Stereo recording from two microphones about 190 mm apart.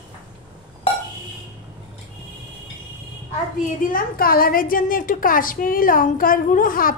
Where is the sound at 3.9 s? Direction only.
50° left (ahead or behind).